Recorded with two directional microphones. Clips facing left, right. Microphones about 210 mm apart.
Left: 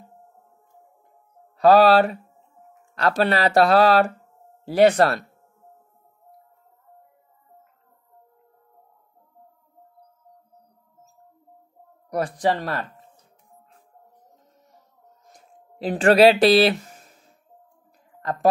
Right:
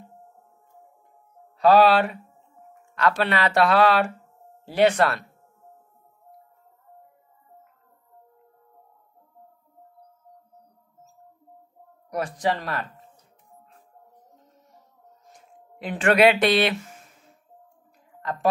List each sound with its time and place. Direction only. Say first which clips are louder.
1.6 s speech: left 2 dB; 40° left (ahead or behind)
12.1 s speech: left 3 dB; 35° left (ahead or behind)
15.3 s a sound: left 4 dB; 35° left (ahead or behind)
18.2 s a woman's voice: left 4 dB; 40° left (ahead or behind)